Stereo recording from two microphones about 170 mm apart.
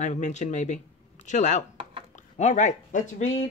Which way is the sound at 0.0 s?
45° left (ahead or behind).